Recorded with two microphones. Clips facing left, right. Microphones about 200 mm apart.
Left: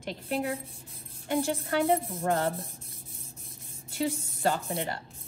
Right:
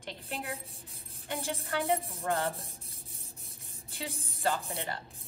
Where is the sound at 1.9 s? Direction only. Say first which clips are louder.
Left 5 dB; 30° left (ahead or behind).